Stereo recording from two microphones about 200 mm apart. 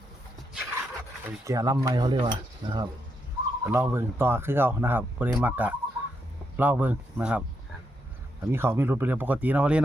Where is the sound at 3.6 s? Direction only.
10° right (ahead or behind).